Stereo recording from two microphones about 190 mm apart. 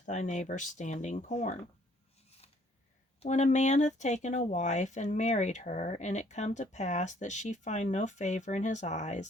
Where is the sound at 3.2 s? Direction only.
40° left (ahead or behind).